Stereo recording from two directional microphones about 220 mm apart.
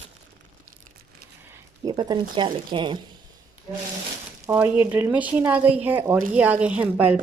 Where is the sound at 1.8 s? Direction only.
20° right (ahead or behind).